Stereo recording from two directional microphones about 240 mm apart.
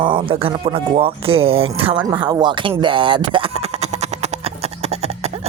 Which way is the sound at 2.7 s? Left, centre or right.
Centre.